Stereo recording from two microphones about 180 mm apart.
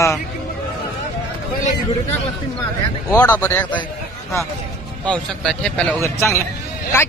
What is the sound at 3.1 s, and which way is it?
Speech, 15° left (ahead or behind).